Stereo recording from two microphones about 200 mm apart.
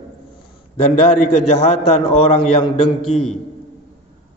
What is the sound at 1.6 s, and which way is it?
A man's voice, 30° left (ahead or behind).